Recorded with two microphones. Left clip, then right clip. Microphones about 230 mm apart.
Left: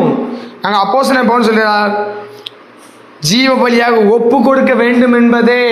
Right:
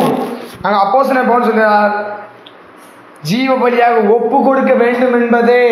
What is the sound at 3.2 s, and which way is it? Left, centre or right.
A man's voice, left.